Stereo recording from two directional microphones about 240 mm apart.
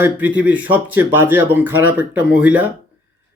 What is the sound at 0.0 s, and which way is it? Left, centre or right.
Speech, centre.